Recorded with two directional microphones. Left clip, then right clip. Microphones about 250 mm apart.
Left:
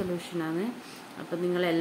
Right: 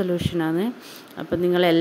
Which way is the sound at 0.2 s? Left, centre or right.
Right.